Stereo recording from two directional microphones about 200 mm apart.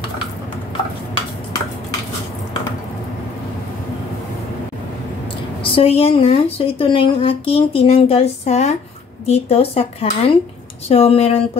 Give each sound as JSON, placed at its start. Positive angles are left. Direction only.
{"t": 5.6, "sound": "a woman's voice", "side_deg": 25}